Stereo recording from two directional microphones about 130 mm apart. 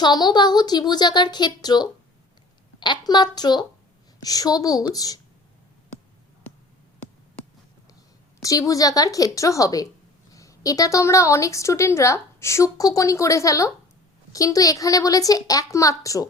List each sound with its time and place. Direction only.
0.0 s a woman's voice: 35° left (ahead or behind)
8.4 s a woman's voice: 25° left (ahead or behind)